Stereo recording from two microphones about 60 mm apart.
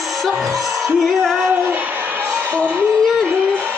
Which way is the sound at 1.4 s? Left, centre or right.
Right.